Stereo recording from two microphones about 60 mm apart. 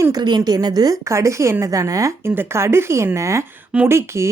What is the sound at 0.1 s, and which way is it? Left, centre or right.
Speech, right.